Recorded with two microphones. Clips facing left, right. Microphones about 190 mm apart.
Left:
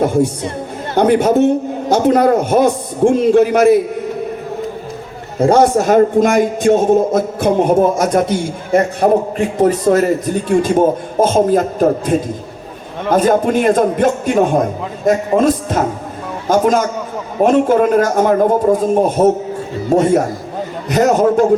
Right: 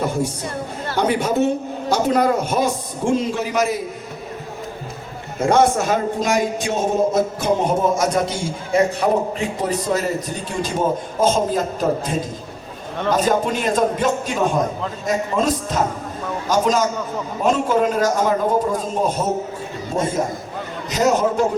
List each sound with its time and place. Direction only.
0.9 s a man's voice: 50° left (ahead or behind)
5.4 s a man's voice: 35° left (ahead or behind); by 19.3 s 55° left (ahead or behind)
19.9 s a man's voice: 65° left (ahead or behind)
20.9 s a man's voice: 55° left (ahead or behind)